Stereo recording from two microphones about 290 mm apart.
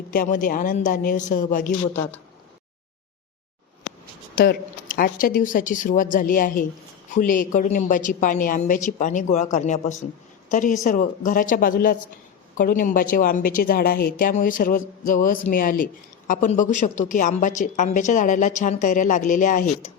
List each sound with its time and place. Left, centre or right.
0.1 s speech: left
1.9 s speech: centre
4.4 s speech: left